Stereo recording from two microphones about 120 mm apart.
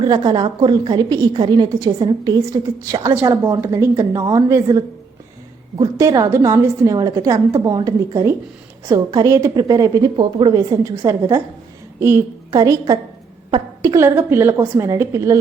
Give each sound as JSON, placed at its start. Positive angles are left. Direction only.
{"t": 0.0, "sound": "a woman's voice", "side_deg": -35}
{"t": 5.8, "sound": "a woman's voice", "side_deg": -30}
{"t": 12.5, "sound": "a woman's voice", "side_deg": -30}